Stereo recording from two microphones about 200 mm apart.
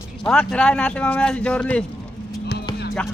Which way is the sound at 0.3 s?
5° left (ahead or behind).